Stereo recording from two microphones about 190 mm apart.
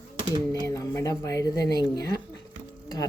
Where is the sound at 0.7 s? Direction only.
15° left (ahead or behind).